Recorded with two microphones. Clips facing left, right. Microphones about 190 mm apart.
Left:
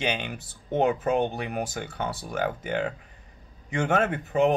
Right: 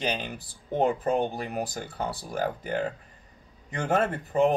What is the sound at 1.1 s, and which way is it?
Speech, centre (ahead or behind).